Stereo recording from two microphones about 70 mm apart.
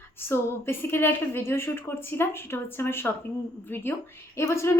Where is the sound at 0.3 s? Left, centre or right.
Left.